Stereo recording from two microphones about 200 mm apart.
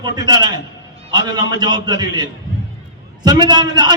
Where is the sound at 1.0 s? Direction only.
20° right (ahead or behind).